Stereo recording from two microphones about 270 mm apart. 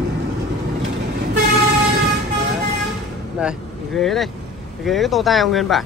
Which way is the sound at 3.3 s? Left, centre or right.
Centre.